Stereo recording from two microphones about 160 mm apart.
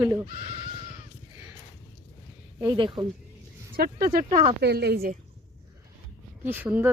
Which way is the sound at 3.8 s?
70° right (ahead or behind).